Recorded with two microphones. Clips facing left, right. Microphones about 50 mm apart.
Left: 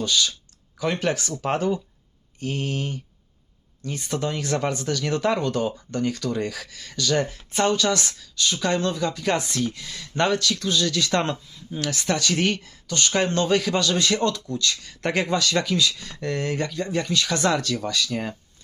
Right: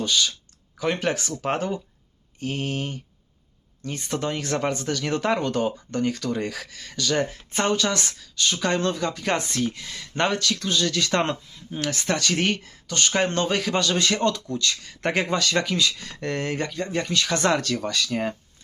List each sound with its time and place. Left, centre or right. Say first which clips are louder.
0.0 s speech: even; right